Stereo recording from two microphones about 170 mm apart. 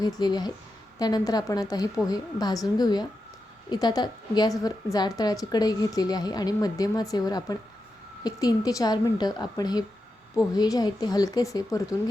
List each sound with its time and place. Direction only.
0.0 s a woman's voice: 25° left (ahead or behind)